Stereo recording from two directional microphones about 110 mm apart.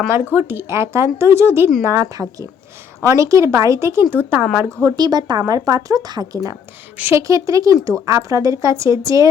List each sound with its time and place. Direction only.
0.3 s speech: 20° right (ahead or behind)
4.8 s speech: 35° right (ahead or behind)
6.9 s a woman's voice: 15° right (ahead or behind)
7.2 s speech: 30° right (ahead or behind)